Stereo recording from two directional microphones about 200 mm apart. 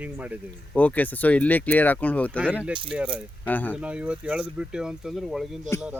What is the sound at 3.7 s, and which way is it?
Speech, 5° right (ahead or behind).